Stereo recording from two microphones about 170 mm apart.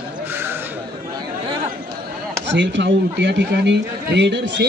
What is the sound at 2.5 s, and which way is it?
A man's voice, 90° right.